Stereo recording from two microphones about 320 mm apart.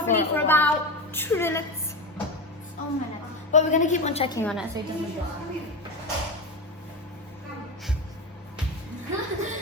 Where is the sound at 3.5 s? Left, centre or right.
Left.